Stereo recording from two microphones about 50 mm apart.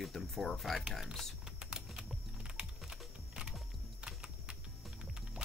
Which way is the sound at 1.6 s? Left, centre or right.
Centre.